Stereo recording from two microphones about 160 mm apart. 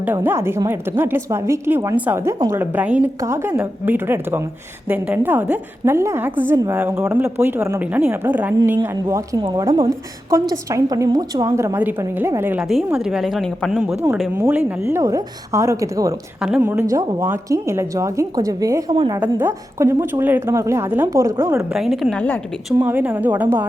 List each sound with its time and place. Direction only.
0.0 s a woman's voice: 15° right (ahead or behind)
12.6 s a woman's voice: centre (ahead or behind)
14.3 s a woman's voice: 15° right (ahead or behind)
19.2 s a woman's voice: 15° right (ahead or behind)
21.7 s a woman's voice: centre (ahead or behind)
22.9 s a woman's voice: 10° right (ahead or behind)